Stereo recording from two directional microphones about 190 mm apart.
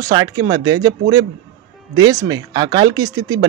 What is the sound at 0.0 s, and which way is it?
Speech, 20° right (ahead or behind).